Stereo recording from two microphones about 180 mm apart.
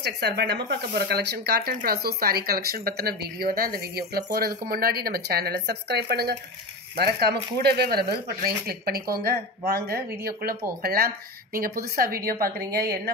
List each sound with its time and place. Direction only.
0.0 s speech: 65° right (ahead or behind)